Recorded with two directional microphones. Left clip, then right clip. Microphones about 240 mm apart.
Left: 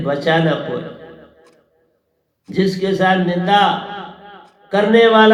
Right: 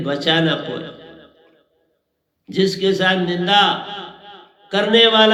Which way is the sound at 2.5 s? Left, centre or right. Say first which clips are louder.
Right 1 dB; right.